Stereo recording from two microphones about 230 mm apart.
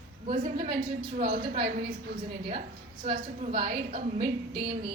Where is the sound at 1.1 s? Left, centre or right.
Right.